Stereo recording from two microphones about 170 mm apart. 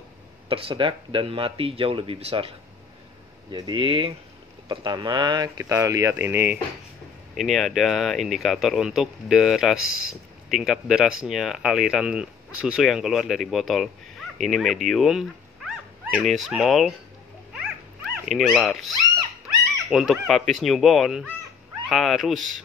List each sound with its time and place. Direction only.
0.5 s speech: 30° right (ahead or behind)
3.5 s speech: 25° right (ahead or behind); by 6.6 s 10° right (ahead or behind)
7.3 s speech: centre (ahead or behind)
18.2 s speech: centre (ahead or behind)
19.9 s speech: centre (ahead or behind)